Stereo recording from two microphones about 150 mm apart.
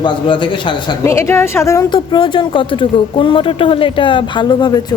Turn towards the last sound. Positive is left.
turn(degrees=30)  # may be behind; listen again after turning